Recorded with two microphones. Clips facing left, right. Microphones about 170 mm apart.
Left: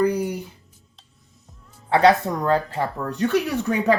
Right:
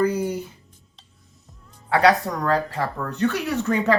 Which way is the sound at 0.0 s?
15° left (ahead or behind).